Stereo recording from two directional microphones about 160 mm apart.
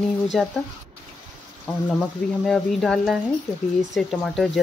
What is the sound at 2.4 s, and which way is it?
Speech, centre (ahead or behind).